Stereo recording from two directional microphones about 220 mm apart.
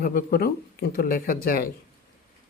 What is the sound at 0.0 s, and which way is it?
Speech, 45° left (ahead or behind).